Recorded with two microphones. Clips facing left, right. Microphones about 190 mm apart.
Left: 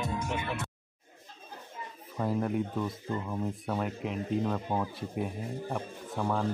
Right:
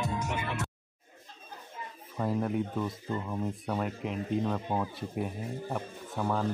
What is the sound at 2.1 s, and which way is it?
Speech, centre (ahead or behind).